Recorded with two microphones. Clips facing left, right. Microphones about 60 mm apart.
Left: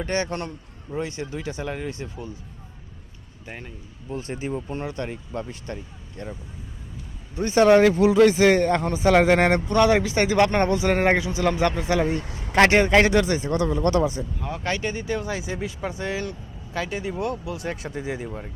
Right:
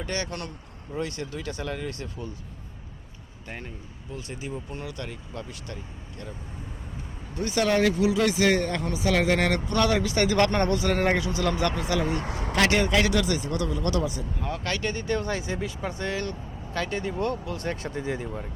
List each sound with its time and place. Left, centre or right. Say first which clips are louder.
0.0 s a man's voice: left 5 dB; left
3.4 s speech: left 1 dB; centre
4.1 s speech: left 6 dB; left
7.3 s a man's voice: left 8 dB; left
12.1 s speech: left 1 dB; right
12.5 s speech: left 6 dB; left
14.6 s speech: left 4 dB; centre
15.0 s speech: even; centre